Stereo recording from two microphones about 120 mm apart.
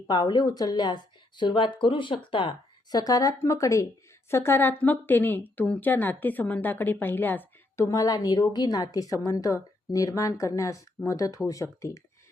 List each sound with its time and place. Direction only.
0.1 s a woman's voice: 35° left (ahead or behind); by 7.9 s 15° left (ahead or behind)
7.9 s a woman's voice: 30° left (ahead or behind)